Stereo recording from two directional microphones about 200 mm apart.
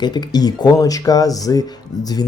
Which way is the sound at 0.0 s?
20° left (ahead or behind).